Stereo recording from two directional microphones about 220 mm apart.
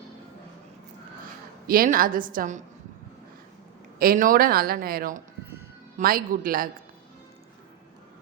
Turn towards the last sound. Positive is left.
turn(degrees=-40)  # may be behind; listen again after turning